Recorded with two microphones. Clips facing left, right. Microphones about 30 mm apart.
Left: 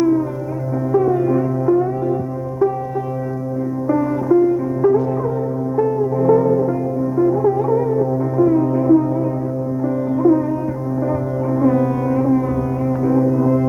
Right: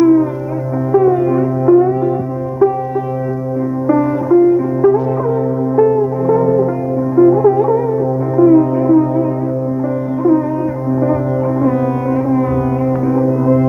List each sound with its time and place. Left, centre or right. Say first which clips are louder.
0.0 s music: right 6 dB; right
3.8 s music: right 4 dB; centre
11.6 s music: right 2 dB; centre